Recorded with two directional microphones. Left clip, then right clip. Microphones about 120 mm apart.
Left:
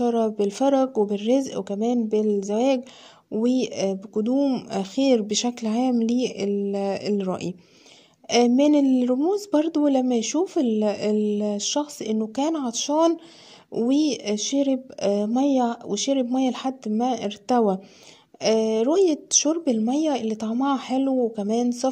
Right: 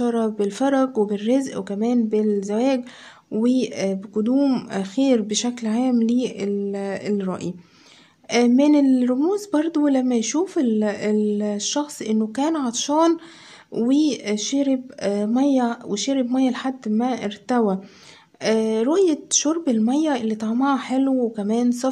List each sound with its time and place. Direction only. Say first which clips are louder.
0.0 s speech: even; 30° left (ahead or behind)
4.4 s speech: right 3 dB; 15° left (ahead or behind)
4.6 s speech: right 1 dB; 35° left (ahead or behind)